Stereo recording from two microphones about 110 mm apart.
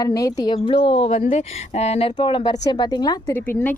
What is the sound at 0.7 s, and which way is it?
Speech, 55° left (ahead or behind).